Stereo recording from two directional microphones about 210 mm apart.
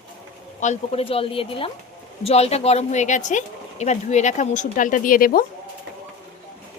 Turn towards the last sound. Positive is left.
turn(degrees=40)  # may be behind; listen again after turning